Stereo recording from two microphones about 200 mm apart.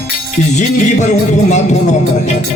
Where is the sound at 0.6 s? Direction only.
35° left (ahead or behind).